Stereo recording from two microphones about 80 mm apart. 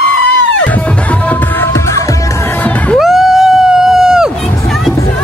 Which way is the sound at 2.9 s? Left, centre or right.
Centre.